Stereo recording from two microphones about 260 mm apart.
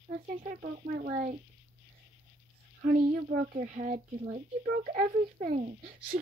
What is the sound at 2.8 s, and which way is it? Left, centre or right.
A child's voice, right.